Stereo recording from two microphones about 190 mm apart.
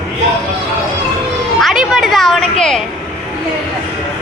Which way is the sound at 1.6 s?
Centre (ahead or behind).